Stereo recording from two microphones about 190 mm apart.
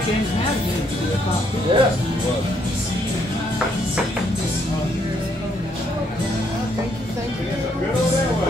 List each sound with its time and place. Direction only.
1.7 s speech: 25° right (ahead or behind)